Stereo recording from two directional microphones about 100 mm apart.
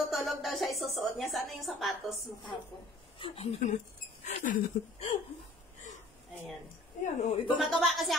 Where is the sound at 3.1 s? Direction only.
65° left (ahead or behind).